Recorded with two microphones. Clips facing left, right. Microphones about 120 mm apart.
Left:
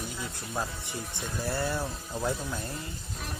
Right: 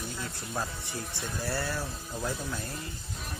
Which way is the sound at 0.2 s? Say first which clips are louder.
Left 1 dB; 10° left (ahead or behind).